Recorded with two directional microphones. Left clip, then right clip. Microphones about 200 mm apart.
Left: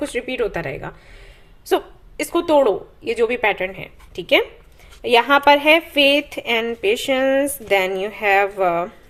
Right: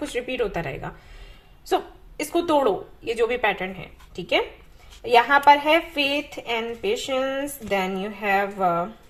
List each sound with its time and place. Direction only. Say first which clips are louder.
0.1 s a woman's voice: left 3 dB; 30° left (ahead or behind); by 8.9 s 50° left (ahead or behind)